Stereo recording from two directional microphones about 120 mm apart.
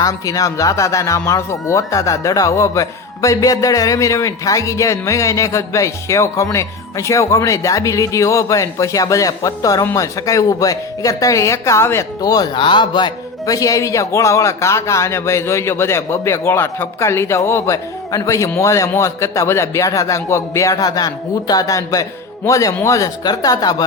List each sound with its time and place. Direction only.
0.0 s speech: 30° left (ahead or behind)